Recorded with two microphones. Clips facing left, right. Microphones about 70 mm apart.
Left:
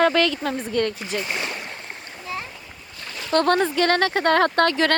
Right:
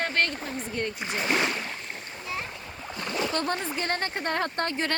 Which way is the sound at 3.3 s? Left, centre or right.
Left.